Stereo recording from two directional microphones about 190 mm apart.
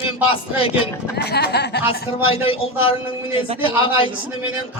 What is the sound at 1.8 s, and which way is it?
Speech, 30° left (ahead or behind).